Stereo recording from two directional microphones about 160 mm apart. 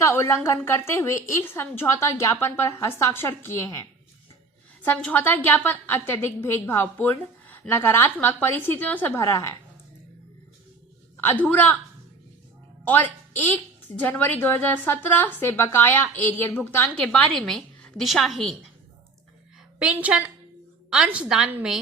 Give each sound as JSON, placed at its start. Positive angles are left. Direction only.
{"t": 0.0, "sound": "a woman's voice", "side_deg": 15}
{"t": 4.9, "sound": "a woman's voice", "side_deg": 10}
{"t": 11.2, "sound": "a woman's voice", "side_deg": 10}
{"t": 12.8, "sound": "a woman's voice", "side_deg": 10}
{"t": 19.8, "sound": "a woman's voice", "side_deg": -10}